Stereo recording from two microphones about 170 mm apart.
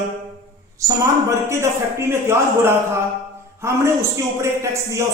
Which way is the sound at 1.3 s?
15° right (ahead or behind).